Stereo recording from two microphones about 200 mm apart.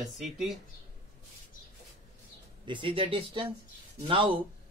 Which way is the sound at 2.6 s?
25° right (ahead or behind).